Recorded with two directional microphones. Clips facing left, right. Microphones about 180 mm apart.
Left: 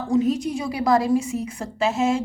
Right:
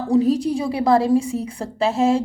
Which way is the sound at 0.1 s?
35° right (ahead or behind).